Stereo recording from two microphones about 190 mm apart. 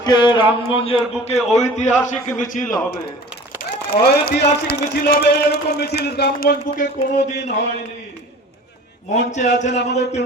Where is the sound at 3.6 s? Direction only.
50° left (ahead or behind).